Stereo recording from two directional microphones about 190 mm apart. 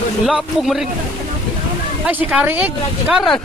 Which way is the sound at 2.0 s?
10° right (ahead or behind).